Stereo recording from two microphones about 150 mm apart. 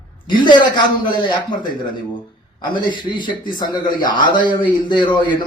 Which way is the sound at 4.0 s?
65° left (ahead or behind).